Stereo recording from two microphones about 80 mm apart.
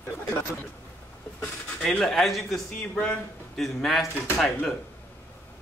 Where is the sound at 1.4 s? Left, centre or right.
Centre.